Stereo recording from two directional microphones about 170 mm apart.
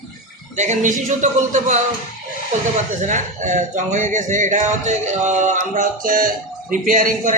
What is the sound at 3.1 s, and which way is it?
Music, 45° right (ahead or behind).